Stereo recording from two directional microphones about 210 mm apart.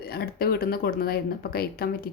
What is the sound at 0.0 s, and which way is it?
Speech, 45° left (ahead or behind).